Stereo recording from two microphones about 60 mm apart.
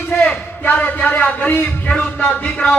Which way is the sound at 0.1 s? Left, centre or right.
Left.